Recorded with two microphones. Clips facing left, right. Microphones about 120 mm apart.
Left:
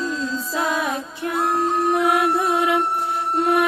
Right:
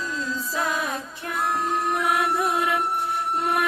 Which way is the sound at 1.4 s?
30° left (ahead or behind).